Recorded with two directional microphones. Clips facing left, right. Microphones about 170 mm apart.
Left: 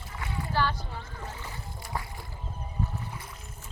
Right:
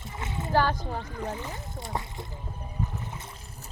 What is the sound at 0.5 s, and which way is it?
Speech, 45° right (ahead or behind).